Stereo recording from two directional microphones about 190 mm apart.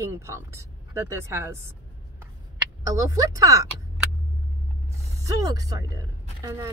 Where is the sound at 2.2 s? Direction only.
15° right (ahead or behind).